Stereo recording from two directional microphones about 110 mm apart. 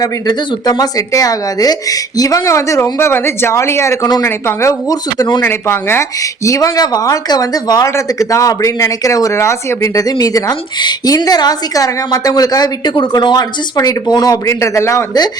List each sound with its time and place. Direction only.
0.0 s speech: 35° left (ahead or behind)
5.4 s speech: 20° left (ahead or behind)